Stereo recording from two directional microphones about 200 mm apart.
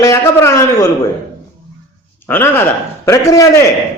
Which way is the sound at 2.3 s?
10° left (ahead or behind).